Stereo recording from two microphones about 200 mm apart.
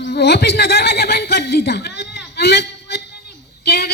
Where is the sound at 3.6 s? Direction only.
55° left (ahead or behind).